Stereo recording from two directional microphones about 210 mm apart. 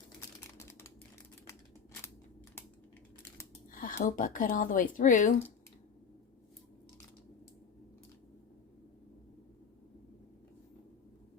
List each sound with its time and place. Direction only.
0.5 s typing: 10° left (ahead or behind)
3.7 s speech: 40° left (ahead or behind)